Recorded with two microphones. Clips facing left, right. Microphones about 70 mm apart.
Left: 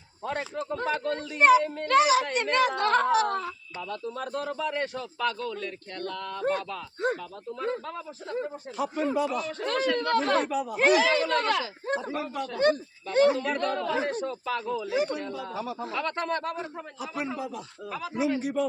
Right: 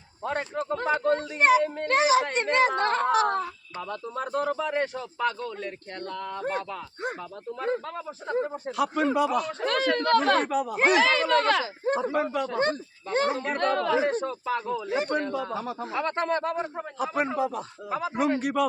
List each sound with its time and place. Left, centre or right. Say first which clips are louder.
0.2 s speech: right 2 dB; right
7.6 s speech: right 2 dB; right
8.7 s a man's voice: right 3 dB; right
11.1 s speech: right 2 dB; right
12.1 s speech: right 5 dB; right
12.5 s speech: left 2 dB; right
13.6 s a man's voice: right 4 dB; right
13.9 s speech: right 4 dB; right
14.8 s speech: right 1 dB; right
15.9 s speech: right 4 dB; right
17.0 s speech: right 7 dB; right
17.8 s speech: right 5 dB; right
18.1 s a man's voice: right 1 dB; right